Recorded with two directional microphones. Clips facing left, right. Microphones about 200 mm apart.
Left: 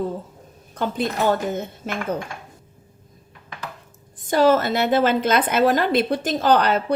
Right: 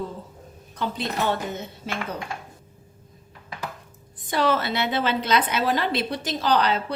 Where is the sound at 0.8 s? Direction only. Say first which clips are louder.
Left 4 dB; 50° left (ahead or behind).